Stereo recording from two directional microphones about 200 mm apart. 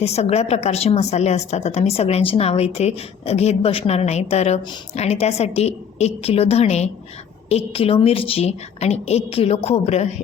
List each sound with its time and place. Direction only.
0.0 s a woman's voice: 30° left (ahead or behind)